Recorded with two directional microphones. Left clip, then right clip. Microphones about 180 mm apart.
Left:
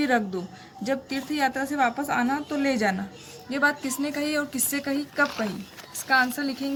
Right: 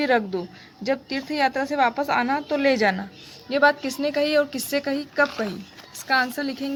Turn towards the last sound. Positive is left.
turn(degrees=-35)  # may be behind; listen again after turning